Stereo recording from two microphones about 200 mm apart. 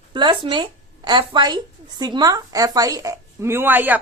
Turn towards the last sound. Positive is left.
turn(degrees=-10)  # may be behind; listen again after turning